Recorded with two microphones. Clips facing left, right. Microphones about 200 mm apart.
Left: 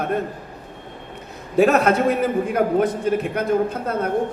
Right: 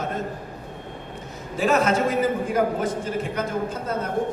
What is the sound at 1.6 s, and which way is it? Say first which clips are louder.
A man's voice: left 5 dB; 60° left (ahead or behind).